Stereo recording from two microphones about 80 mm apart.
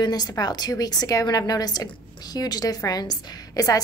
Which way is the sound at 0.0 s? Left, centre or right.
Left.